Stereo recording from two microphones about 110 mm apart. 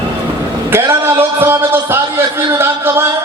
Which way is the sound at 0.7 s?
20° right (ahead or behind).